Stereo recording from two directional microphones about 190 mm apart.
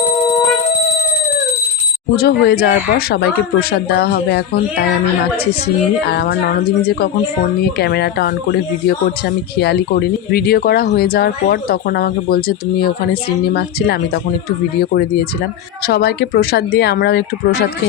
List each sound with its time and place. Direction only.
2.1 s speech: 55° left (ahead or behind)
6.1 s speech: 55° left (ahead or behind)
9.6 s speech: 55° left (ahead or behind)